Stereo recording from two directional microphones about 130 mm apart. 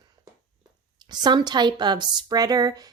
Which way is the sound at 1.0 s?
35° right (ahead or behind).